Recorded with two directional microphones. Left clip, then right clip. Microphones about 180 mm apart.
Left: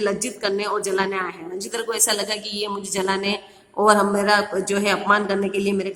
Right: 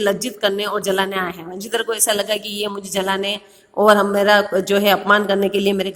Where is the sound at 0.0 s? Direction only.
30° right (ahead or behind).